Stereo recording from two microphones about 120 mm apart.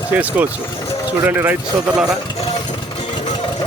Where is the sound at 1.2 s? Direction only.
15° right (ahead or behind).